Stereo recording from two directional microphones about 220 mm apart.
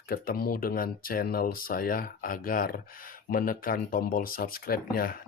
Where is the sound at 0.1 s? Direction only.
40° left (ahead or behind).